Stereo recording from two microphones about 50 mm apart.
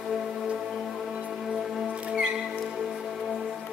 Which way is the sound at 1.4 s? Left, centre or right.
Centre.